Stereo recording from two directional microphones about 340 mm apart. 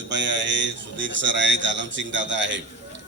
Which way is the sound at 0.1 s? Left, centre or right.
Right.